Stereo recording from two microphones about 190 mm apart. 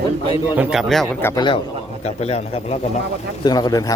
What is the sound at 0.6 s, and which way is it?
Speech, centre (ahead or behind).